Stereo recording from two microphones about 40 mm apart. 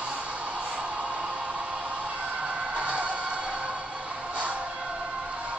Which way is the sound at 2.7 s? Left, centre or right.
Right.